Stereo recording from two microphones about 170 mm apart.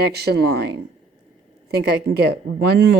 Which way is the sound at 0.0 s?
70° right (ahead or behind).